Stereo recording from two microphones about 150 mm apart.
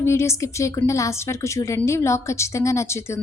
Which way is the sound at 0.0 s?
20° left (ahead or behind).